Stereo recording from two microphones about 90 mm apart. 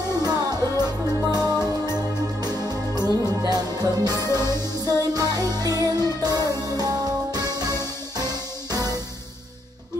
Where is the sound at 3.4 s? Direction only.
45° right (ahead or behind).